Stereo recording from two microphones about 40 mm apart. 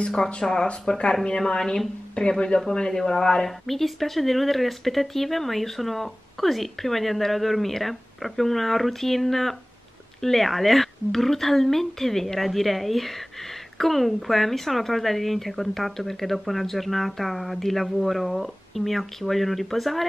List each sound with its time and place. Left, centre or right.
0.4 s speech: centre
3.4 s speech: centre